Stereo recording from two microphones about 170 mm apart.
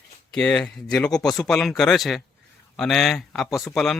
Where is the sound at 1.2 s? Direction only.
20° left (ahead or behind).